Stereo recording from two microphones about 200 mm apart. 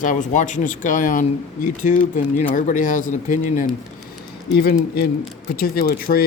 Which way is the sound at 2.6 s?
40° left (ahead or behind).